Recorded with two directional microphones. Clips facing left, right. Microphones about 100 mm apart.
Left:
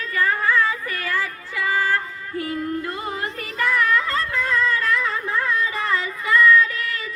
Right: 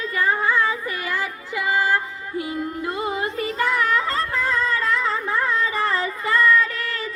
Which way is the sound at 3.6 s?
25° right (ahead or behind).